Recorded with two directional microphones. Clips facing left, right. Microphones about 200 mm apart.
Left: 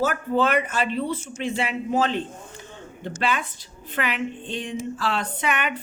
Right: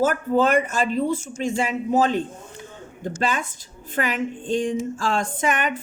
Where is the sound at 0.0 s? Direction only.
45° right (ahead or behind).